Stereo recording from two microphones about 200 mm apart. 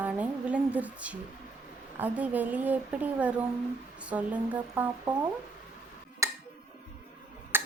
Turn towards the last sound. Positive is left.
turn(degrees=-10)  # may be behind; listen again after turning